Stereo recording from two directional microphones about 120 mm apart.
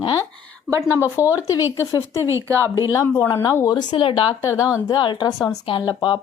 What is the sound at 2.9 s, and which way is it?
A woman's voice, 25° left (ahead or behind).